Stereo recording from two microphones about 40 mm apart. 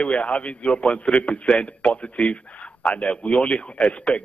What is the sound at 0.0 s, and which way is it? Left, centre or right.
A man's voice, left.